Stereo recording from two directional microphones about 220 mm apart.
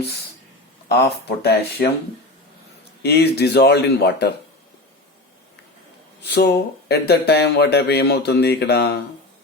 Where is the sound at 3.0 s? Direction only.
50° left (ahead or behind).